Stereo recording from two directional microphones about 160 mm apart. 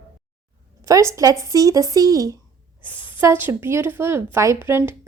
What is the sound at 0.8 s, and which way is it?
A woman's voice, 20° right (ahead or behind).